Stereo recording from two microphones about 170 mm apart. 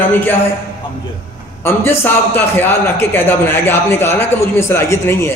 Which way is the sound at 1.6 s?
15° left (ahead or behind).